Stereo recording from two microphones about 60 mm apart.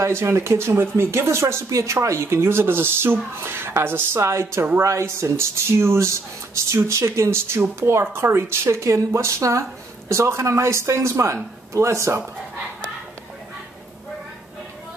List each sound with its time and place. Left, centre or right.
0.0 s speech: right